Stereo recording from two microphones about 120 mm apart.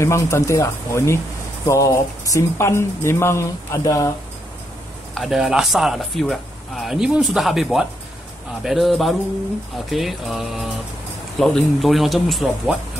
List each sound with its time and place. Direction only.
0.0 s speech: 25° left (ahead or behind)
5.1 s speech: centre (ahead or behind)